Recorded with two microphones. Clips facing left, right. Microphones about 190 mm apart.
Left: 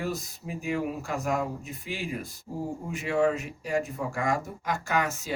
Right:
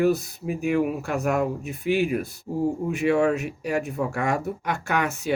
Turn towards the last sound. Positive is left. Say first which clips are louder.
# right 4 dB
turn(degrees=-65)  # may be behind; listen again after turning